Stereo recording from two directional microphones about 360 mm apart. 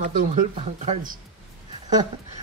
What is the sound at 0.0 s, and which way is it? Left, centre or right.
Speech, right.